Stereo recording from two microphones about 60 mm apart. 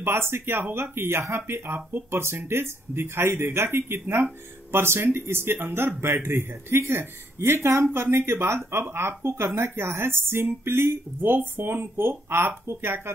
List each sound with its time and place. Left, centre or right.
0.0 s speech: right